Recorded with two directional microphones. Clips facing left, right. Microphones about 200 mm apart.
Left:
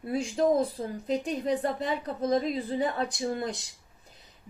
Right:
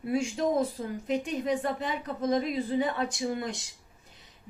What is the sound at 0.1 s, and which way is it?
A woman's voice, 35° left (ahead or behind).